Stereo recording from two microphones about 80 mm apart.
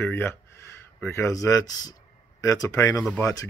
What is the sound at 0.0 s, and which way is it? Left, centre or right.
Speech, left.